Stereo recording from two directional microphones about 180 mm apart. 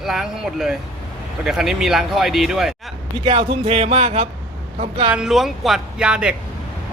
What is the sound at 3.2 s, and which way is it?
Speech, 30° right (ahead or behind).